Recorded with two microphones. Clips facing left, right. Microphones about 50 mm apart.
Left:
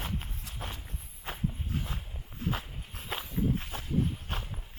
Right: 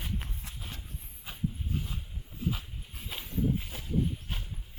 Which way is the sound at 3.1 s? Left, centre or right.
Left.